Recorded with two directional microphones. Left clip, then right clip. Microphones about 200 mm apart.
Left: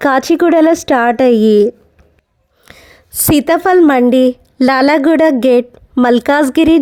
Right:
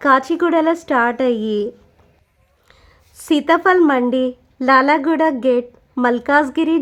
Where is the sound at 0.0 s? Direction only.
30° left (ahead or behind).